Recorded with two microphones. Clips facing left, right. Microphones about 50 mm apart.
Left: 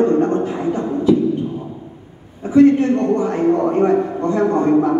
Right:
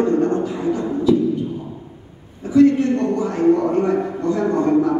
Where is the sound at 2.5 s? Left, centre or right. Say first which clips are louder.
Left 2 dB; left.